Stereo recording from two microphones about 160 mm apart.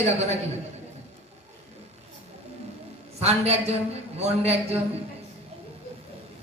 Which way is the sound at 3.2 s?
40° right (ahead or behind).